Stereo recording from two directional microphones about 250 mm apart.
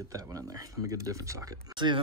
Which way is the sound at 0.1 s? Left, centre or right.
Centre.